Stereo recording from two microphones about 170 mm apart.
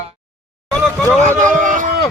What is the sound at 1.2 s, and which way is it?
Speech, 45° right (ahead or behind).